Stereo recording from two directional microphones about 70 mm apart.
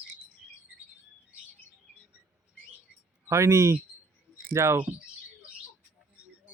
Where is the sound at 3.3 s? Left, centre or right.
Right.